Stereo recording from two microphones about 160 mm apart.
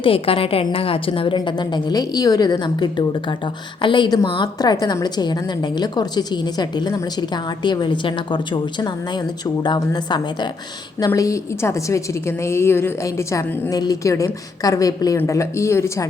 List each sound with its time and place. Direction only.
0.0 s a woman's voice: 35° left (ahead or behind)
9.6 s a woman's voice: 25° left (ahead or behind)